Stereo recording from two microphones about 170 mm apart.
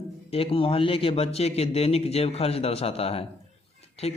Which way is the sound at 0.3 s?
35° left (ahead or behind).